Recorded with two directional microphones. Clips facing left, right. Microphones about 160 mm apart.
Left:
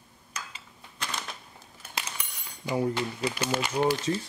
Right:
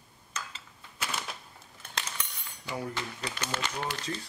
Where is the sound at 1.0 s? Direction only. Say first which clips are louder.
Even; 5° right (ahead or behind).